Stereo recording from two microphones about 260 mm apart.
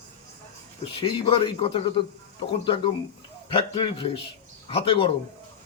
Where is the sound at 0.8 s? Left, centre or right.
Left.